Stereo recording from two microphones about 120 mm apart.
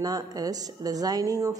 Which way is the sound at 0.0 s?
30° right (ahead or behind).